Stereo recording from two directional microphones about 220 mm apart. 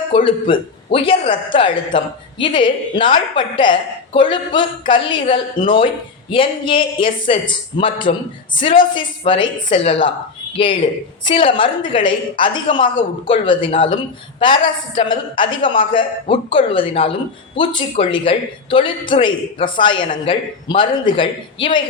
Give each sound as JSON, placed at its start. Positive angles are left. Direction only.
{"t": 0.3, "sound": "a woman's voice", "side_deg": 25}